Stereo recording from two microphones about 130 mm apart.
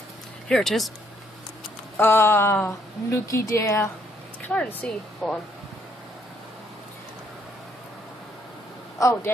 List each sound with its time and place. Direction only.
0.5 s a woman's voice: 5° left (ahead or behind)
2.0 s a woman's voice: 15° left (ahead or behind)
4.5 s a woman's voice: 5° left (ahead or behind)